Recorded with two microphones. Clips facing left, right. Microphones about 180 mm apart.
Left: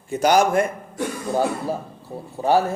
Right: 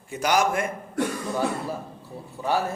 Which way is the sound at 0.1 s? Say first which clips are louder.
Left 6 dB; 30° left (ahead or behind).